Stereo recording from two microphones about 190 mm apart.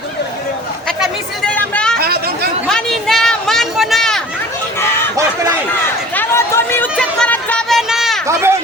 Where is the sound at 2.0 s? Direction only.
55° right (ahead or behind).